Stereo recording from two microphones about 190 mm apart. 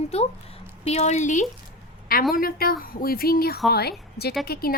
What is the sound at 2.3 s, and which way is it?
A woman's voice, 50° left (ahead or behind).